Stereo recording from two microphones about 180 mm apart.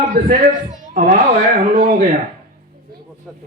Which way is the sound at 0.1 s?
50° right (ahead or behind).